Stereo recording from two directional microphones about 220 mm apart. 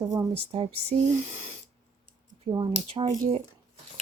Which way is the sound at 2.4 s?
20° right (ahead or behind).